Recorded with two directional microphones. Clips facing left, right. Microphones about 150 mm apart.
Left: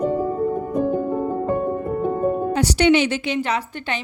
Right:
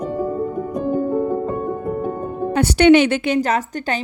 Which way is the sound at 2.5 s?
55° right (ahead or behind).